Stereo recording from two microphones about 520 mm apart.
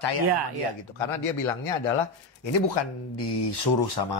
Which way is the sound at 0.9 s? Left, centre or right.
Left.